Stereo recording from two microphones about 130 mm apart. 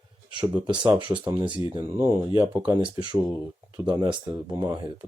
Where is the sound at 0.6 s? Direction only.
35° right (ahead or behind).